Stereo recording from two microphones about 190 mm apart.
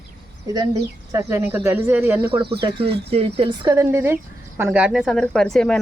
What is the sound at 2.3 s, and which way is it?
Speech, 25° right (ahead or behind).